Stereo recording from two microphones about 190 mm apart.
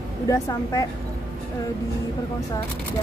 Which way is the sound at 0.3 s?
15° left (ahead or behind).